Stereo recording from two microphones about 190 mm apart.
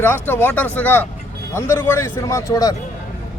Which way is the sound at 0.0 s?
10° left (ahead or behind).